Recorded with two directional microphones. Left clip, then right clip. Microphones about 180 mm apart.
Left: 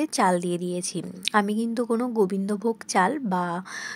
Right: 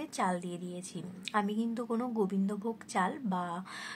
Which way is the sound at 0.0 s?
40° left (ahead or behind).